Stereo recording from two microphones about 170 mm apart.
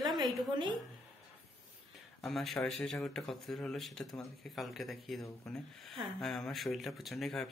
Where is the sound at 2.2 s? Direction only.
Centre (ahead or behind).